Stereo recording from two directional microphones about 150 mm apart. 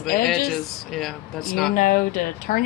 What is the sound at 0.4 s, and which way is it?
Speech, centre (ahead or behind).